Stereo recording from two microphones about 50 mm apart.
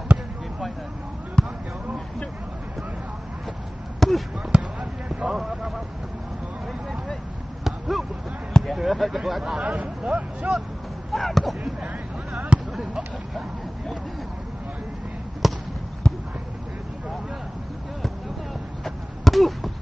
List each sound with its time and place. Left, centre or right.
1.4 s basketball bounce: centre
4.0 s basketball bounce: centre
4.7 s basketball bounce: right
7.6 s basketball bounce: centre
8.7 s speech: centre
9.4 s speech: centre
11.1 s speech: centre
12.5 s basketball bounce: right
15.4 s basketball bounce: centre
16.0 s a sound: centre
18.9 s basketball bounce: centre